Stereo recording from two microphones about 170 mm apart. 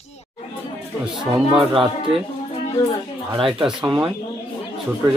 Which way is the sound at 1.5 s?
30° right (ahead or behind).